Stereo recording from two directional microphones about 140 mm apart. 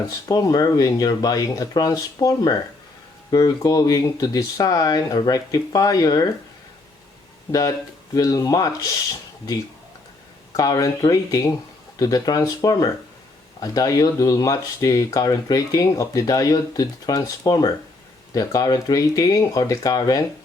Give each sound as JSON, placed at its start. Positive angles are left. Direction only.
{"t": 0.3, "sound": "speech", "side_deg": 25}
{"t": 8.1, "sound": "speech", "side_deg": 25}
{"t": 10.6, "sound": "speech", "side_deg": 25}